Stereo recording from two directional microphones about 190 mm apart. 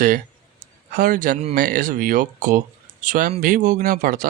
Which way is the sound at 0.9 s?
45° right (ahead or behind).